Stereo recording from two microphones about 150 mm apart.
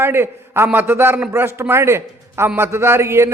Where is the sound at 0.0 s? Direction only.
15° right (ahead or behind).